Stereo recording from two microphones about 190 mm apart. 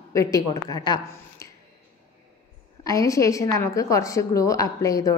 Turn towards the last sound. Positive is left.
turn(degrees=20)  # may be behind; listen again after turning